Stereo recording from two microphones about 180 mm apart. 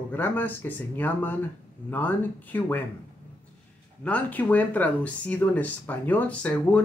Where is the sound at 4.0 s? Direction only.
10° left (ahead or behind).